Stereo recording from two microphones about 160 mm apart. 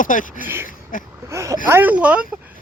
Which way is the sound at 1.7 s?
10° right (ahead or behind).